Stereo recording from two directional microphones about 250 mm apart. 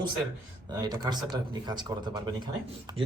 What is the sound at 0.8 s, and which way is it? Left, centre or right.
Speech, centre.